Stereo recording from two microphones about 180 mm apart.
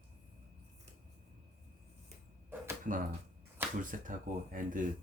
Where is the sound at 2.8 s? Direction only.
45° right (ahead or behind).